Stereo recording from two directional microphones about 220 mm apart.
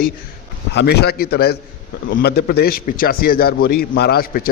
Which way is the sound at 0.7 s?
50° left (ahead or behind).